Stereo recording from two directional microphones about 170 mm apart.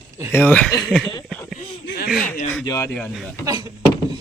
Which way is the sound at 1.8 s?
65° left (ahead or behind).